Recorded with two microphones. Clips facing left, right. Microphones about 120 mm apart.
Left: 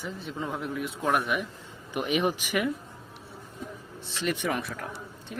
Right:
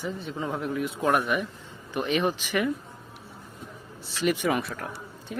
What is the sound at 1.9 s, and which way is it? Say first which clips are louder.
Speech: right 1 dB; 10° left (ahead or behind).